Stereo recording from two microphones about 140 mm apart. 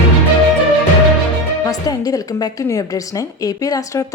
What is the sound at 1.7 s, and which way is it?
A woman's voice, 25° left (ahead or behind).